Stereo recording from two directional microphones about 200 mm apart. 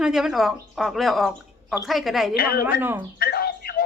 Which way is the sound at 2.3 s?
50° left (ahead or behind).